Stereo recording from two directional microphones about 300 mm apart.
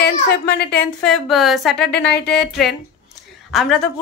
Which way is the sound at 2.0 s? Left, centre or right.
Left.